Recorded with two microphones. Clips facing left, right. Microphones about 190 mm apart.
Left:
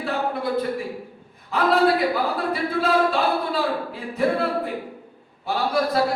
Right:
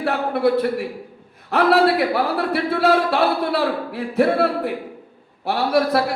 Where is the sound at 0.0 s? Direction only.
70° right (ahead or behind).